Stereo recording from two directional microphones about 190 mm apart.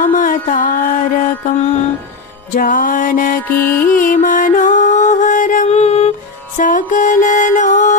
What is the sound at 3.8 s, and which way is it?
Music, 45° left (ahead or behind).